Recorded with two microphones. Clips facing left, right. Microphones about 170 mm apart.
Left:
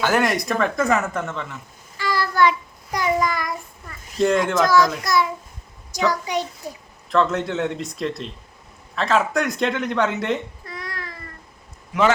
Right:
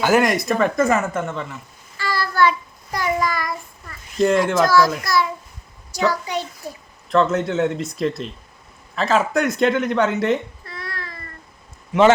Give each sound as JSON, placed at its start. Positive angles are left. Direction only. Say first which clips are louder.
{"t": 0.0, "sound": "speech", "louder": "right 3 dB", "side_deg": -5}
{"t": 2.0, "sound": "child singing", "louder": "even", "side_deg": 15}
{"t": 4.2, "sound": "speech", "louder": "right 2 dB", "side_deg": -5}
{"t": 5.0, "sound": "a child's voice", "louder": "even", "side_deg": 15}
{"t": 7.1, "sound": "speech", "louder": "right 2 dB", "side_deg": 0}
{"t": 10.7, "sound": "babbling", "louder": "right 2 dB", "side_deg": 15}
{"t": 11.9, "sound": "speech", "louder": "right 5 dB", "side_deg": -25}